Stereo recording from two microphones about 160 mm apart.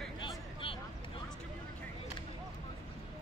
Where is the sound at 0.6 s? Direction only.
35° left (ahead or behind).